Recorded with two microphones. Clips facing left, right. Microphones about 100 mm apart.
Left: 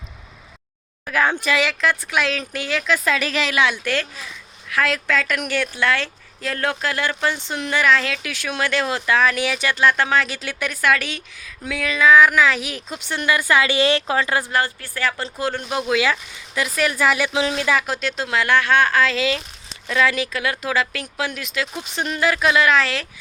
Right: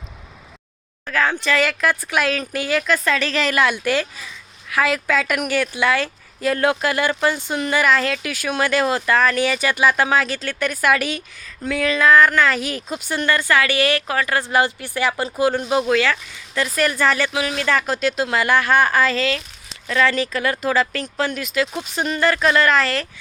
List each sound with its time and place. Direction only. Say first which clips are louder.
1.0 s speech: even; 15° left (ahead or behind)
1.6 s a woman's voice: right 1 dB; 5° right (ahead or behind)
10.8 s a woman's voice: right 1 dB; 5° right (ahead or behind)
13.3 s a woman's voice: left 1 dB; 15° left (ahead or behind)
14.5 s speech: right 4 dB; 20° right (ahead or behind)
15.9 s a woman's voice: right 1 dB; 10° left (ahead or behind)
17.3 s a woman's voice: left 2 dB; 20° left (ahead or behind)
17.7 s a woman's voice: right 2 dB; centre (ahead or behind)
19.9 s a woman's voice: right 1 dB; 5° left (ahead or behind)